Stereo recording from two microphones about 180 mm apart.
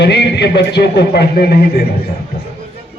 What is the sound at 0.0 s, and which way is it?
A man's voice, 65° left (ahead or behind).